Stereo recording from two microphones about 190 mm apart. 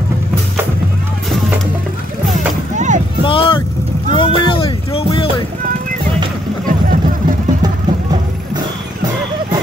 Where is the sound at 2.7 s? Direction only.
40° right (ahead or behind).